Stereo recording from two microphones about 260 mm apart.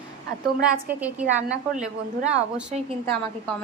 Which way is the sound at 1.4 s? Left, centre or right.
Right.